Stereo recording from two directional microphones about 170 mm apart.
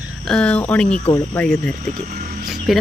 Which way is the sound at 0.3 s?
5° left (ahead or behind).